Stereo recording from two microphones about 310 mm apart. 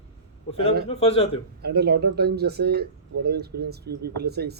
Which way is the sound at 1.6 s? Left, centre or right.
Right.